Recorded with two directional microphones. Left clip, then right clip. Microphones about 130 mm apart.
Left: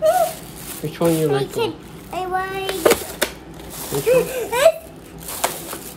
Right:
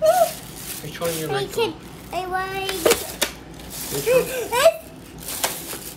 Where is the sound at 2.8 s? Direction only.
20° left (ahead or behind).